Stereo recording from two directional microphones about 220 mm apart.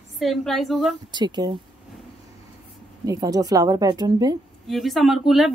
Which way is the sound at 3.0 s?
15° right (ahead or behind).